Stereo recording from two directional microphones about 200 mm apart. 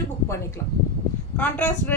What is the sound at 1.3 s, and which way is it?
Speech, 5° left (ahead or behind).